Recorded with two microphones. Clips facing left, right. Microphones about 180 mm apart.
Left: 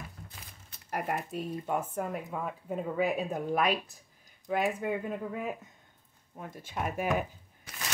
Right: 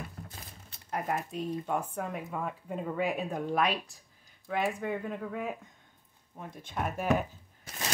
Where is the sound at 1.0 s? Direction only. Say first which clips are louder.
Right 2 dB; 5° left (ahead or behind).